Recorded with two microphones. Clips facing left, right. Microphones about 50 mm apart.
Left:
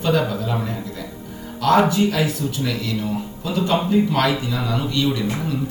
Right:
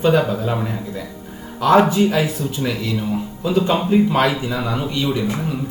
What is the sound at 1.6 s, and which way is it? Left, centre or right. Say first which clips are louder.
Speech: right 2 dB; right.